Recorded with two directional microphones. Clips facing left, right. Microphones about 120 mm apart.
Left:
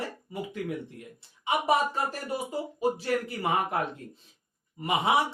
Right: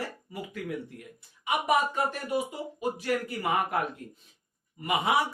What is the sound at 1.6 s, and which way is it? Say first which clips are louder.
Speech: right 1 dB; 35° left (ahead or behind).